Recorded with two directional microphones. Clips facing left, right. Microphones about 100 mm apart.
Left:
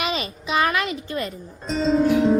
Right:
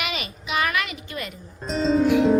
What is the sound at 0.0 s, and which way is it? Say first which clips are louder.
Music: left 4 dB; 30° left (ahead or behind).